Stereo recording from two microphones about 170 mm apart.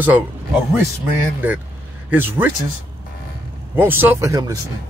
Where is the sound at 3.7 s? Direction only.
10° right (ahead or behind).